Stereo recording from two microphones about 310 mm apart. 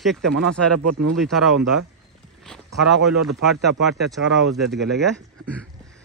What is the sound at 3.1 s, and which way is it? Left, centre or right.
Speech, right.